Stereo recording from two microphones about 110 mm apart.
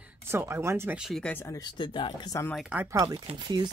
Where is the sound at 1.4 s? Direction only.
30° left (ahead or behind).